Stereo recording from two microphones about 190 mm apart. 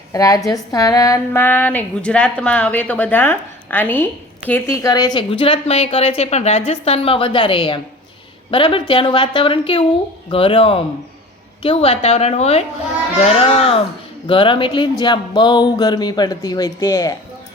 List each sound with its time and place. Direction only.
0.1 s a woman's voice: 20° left (ahead or behind)